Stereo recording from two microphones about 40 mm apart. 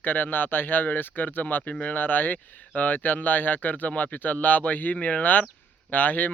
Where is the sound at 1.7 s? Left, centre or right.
Left.